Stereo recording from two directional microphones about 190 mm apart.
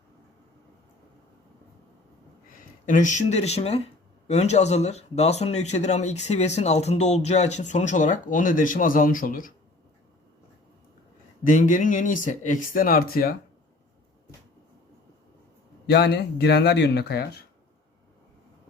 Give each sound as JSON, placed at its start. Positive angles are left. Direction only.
{"t": 2.8, "sound": "speech", "side_deg": 45}
{"t": 11.4, "sound": "speech", "side_deg": 40}
{"t": 15.9, "sound": "speech", "side_deg": 60}